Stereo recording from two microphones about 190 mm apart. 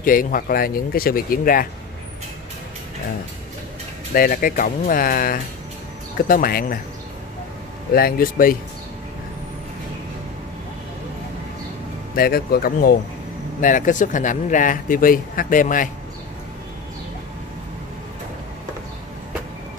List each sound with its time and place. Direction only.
0.0 s speech: 45° left (ahead or behind)
4.1 s speech: 50° left (ahead or behind)
7.9 s speech: 50° left (ahead or behind)
12.2 s speech: 50° left (ahead or behind)